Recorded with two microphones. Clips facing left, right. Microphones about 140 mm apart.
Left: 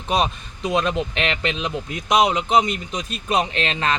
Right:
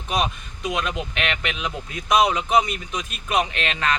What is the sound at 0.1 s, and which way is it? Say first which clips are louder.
Speech: left 3 dB; 30° left (ahead or behind).